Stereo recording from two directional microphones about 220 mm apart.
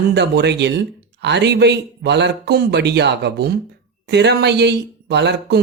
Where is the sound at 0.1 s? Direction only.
50° right (ahead or behind).